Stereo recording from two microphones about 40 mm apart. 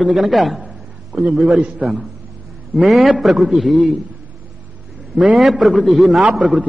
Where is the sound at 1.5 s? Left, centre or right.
Right.